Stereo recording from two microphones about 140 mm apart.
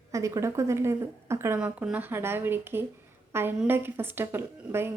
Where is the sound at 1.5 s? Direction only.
10° right (ahead or behind).